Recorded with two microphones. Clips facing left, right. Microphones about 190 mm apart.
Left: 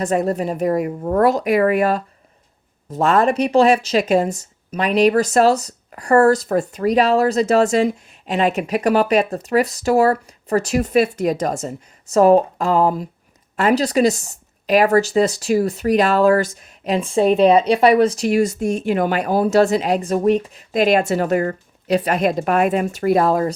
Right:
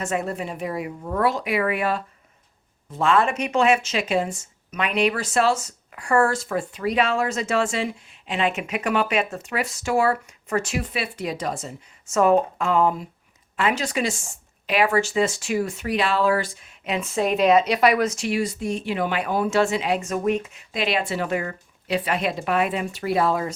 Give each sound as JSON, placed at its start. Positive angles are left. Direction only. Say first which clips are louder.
{"t": 0.0, "sound": "speech", "louder": "left 7 dB", "side_deg": 40}